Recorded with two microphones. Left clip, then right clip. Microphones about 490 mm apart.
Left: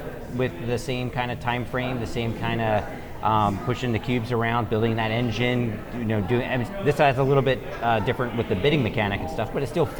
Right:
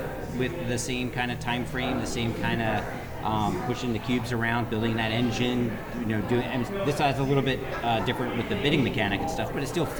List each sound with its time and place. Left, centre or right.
0.3 s speech: left